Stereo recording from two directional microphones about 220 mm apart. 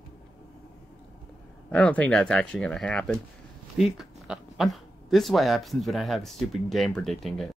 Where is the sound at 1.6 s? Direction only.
5° left (ahead or behind).